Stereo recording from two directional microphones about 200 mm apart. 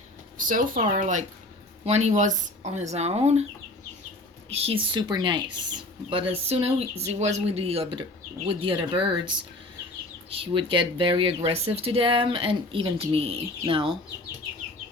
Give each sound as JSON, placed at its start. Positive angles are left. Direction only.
{"t": 0.3, "sound": "speech", "side_deg": -40}
{"t": 4.4, "sound": "speech", "side_deg": -30}